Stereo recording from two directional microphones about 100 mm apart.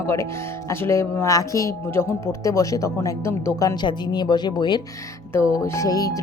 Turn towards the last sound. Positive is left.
turn(degrees=40)  # may be behind; listen again after turning